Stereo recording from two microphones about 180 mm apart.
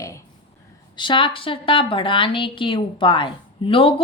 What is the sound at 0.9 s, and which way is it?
A woman's voice, 25° left (ahead or behind).